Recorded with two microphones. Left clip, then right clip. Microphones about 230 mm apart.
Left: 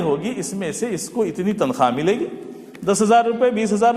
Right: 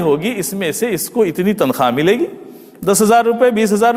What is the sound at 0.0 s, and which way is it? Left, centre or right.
A man's voice, right.